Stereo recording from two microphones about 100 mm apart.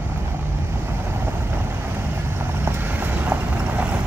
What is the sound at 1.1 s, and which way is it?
Vehicle, 20° right (ahead or behind).